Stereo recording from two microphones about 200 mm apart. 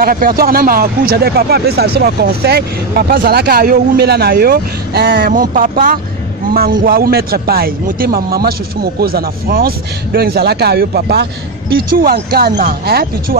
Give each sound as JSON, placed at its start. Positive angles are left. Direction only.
{"t": 0.0, "sound": "speech", "side_deg": -45}